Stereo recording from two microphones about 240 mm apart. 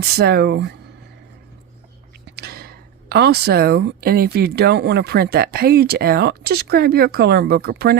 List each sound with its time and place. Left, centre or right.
0.0 s speech: right
2.2 s speech: right